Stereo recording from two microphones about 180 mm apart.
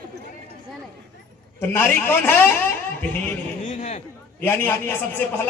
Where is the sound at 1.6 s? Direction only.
15° left (ahead or behind).